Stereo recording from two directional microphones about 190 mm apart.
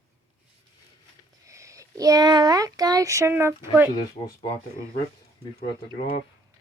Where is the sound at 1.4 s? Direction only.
15° right (ahead or behind).